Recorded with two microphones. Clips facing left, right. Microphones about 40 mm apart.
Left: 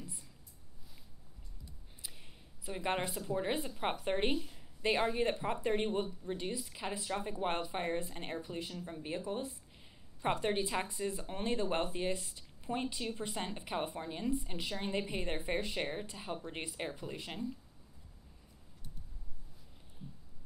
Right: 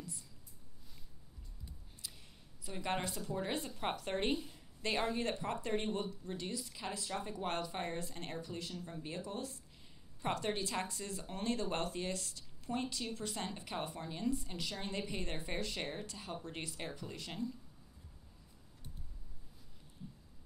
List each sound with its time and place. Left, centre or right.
2.6 s a woman's voice: centre